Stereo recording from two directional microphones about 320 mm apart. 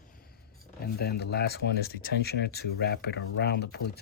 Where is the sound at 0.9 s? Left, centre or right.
Left.